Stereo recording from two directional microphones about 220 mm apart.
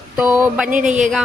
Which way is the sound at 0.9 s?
35° right (ahead or behind).